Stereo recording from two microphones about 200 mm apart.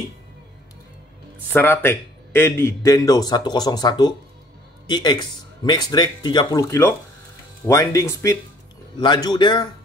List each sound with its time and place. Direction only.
1.5 s speech: 10° left (ahead or behind)